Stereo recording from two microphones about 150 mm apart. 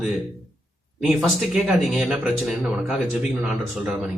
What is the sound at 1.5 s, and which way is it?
Speech, centre (ahead or behind).